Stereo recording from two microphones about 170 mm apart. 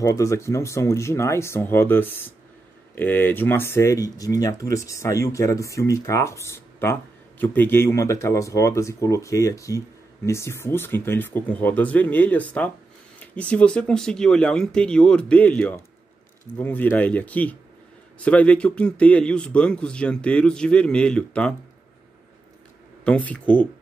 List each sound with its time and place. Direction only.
0.0 s speech: 20° left (ahead or behind)
23.0 s speech: 5° left (ahead or behind)